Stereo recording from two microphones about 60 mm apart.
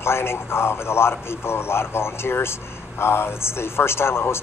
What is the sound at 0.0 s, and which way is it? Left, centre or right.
A man's voice, left.